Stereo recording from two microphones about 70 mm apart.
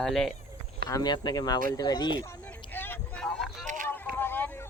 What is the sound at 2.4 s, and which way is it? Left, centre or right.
Vehicle, left.